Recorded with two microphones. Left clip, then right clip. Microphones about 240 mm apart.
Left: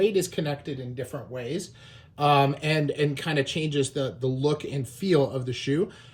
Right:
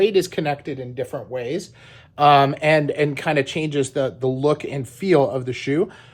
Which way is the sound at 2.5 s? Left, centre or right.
Centre.